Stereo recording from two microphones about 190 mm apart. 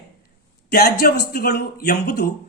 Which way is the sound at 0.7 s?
50° left (ahead or behind).